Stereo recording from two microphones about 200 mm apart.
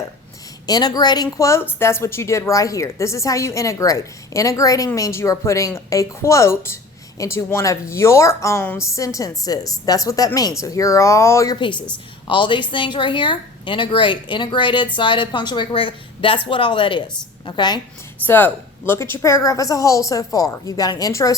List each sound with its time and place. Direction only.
0.7 s a woman's voice: 20° left (ahead or behind)
18.3 s a woman's voice: 10° left (ahead or behind)